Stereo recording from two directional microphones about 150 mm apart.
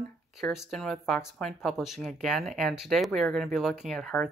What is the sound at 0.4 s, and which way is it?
Speech, centre (ahead or behind).